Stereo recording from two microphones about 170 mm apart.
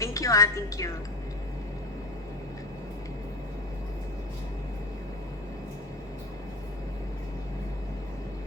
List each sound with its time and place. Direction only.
0.0 s a woman's voice: 20° left (ahead or behind)